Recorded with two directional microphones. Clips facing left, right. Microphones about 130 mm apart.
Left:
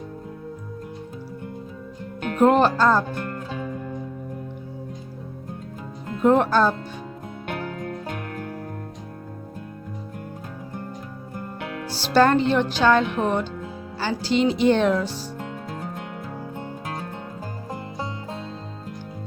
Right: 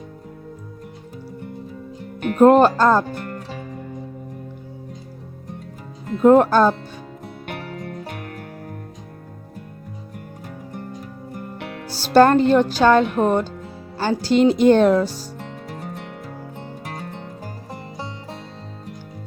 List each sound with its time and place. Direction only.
2.4 s speech: 45° right (ahead or behind)
6.2 s speech: 40° right (ahead or behind)
11.9 s speech: 45° right (ahead or behind)